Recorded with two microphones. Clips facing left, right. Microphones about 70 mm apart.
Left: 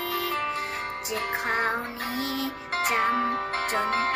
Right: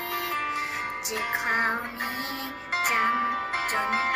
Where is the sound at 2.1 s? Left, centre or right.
Right.